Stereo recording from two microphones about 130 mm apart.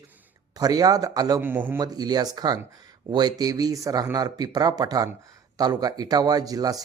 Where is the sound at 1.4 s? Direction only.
15° right (ahead or behind).